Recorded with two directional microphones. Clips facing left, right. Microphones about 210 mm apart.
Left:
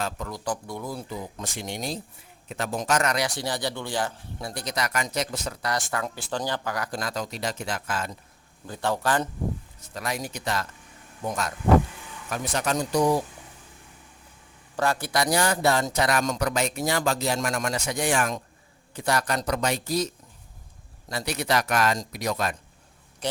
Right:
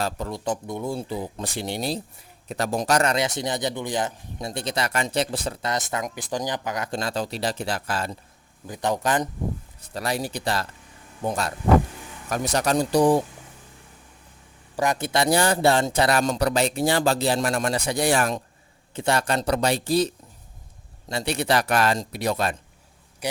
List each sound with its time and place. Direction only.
0.0 s a man's voice: 30° right (ahead or behind)
8.6 s speech: 15° right (ahead or behind)
9.9 s speech: 30° right (ahead or behind)
14.8 s a man's voice: 20° right (ahead or behind)
23.2 s a man's voice: 10° right (ahead or behind)